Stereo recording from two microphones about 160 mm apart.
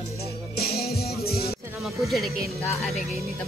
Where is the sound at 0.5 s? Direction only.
75° left (ahead or behind).